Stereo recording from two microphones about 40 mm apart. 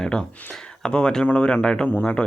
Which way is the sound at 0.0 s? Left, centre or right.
Centre.